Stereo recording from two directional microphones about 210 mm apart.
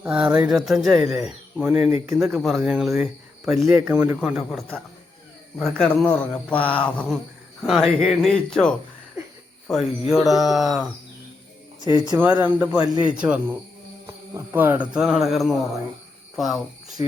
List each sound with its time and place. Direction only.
0.0 s speech: 5° right (ahead or behind)
11.8 s speech: 20° right (ahead or behind); by 17.0 s centre (ahead or behind)